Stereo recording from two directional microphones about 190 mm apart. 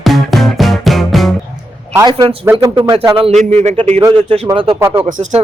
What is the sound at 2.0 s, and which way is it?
Speech, 25° right (ahead or behind).